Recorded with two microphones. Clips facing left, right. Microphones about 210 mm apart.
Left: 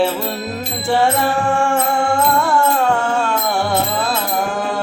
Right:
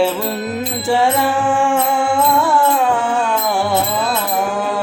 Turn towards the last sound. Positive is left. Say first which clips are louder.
# right 1 dB
turn(degrees=-5)  # may be behind; listen again after turning